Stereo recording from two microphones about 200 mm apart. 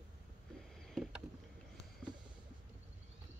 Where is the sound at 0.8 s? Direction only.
Centre (ahead or behind).